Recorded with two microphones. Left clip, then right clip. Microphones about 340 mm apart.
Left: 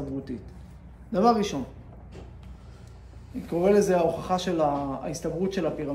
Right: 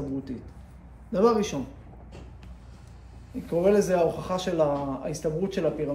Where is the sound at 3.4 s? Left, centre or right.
Centre.